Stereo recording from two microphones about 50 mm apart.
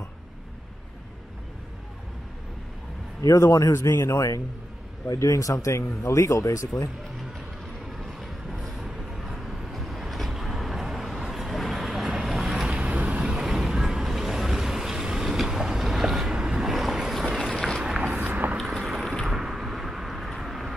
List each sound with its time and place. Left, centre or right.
3.2 s speech: left
8.2 s vehicle: centre
12.6 s vehicle: centre
15.3 s boat: centre
17.5 s a sound: centre
17.8 s a sound: centre
18.2 s biting: right
18.9 s vehicle: centre